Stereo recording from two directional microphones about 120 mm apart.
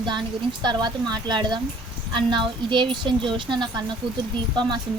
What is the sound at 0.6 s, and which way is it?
Speech, 35° right (ahead or behind).